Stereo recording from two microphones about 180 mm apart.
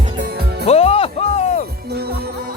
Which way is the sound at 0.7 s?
35° left (ahead or behind).